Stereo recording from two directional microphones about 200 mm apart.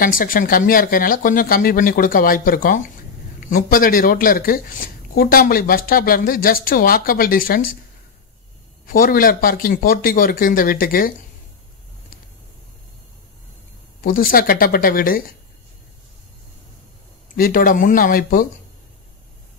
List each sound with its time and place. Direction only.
0.0 s speech: 45° left (ahead or behind)
8.8 s speech: 45° left (ahead or behind)
14.0 s speech: 45° left (ahead or behind)
17.4 s speech: 45° left (ahead or behind)